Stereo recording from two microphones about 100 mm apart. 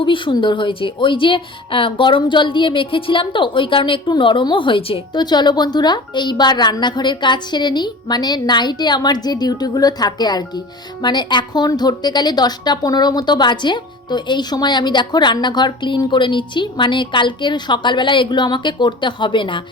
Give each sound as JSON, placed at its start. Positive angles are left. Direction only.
{"t": 0.0, "sound": "a woman's voice", "side_deg": 55}
{"t": 5.1, "sound": "a woman's voice", "side_deg": 45}